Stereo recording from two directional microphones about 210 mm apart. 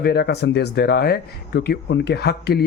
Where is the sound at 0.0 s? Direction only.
50° left (ahead or behind).